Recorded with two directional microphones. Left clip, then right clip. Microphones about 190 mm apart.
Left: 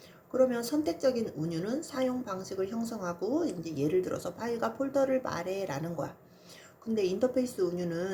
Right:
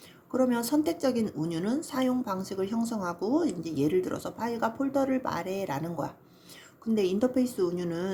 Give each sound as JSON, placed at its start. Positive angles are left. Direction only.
{"t": 0.3, "sound": "a woman's voice", "side_deg": -25}